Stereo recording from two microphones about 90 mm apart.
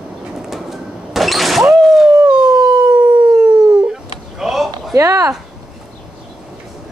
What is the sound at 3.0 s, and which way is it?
Howl, 15° right (ahead or behind).